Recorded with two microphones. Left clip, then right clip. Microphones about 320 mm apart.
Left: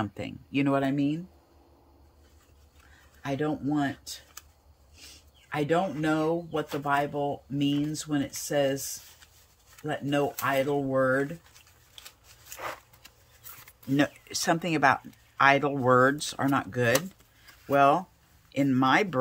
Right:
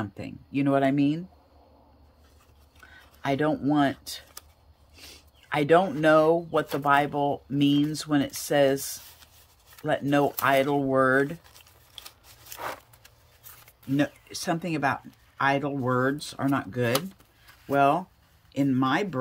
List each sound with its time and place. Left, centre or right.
0.0 s speech: centre
3.2 s speech: centre
9.8 s speech: centre
11.5 s tearing: right
13.9 s speech: centre